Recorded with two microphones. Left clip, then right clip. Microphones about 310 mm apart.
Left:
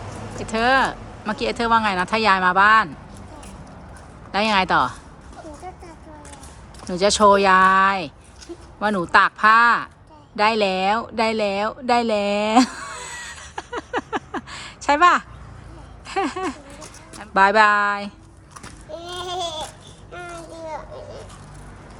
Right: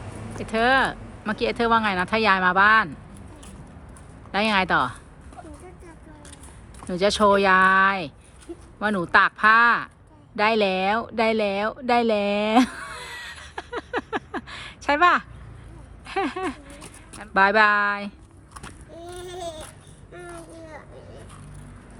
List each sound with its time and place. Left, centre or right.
0.4 s speech: centre
4.3 s speech: centre
6.8 s speech: centre
10.3 s a sound: centre
16.0 s speech: centre
18.9 s a sound: centre